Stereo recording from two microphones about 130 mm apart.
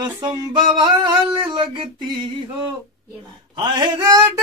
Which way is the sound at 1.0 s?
35° right (ahead or behind).